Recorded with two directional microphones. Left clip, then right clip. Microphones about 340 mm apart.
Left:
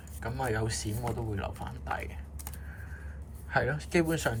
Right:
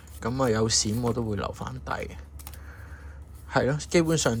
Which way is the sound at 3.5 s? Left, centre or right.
Centre.